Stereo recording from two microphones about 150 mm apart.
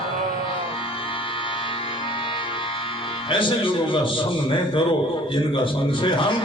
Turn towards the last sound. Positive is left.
turn(degrees=35)  # may be behind; listen again after turning